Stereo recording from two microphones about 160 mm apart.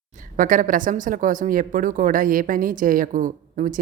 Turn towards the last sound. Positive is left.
turn(degrees=-55)  # may be behind; listen again after turning